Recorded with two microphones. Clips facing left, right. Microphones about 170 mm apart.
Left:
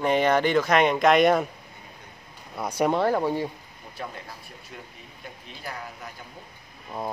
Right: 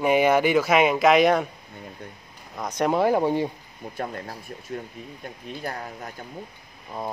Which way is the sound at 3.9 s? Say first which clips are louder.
Right 5 dB; 50° right (ahead or behind).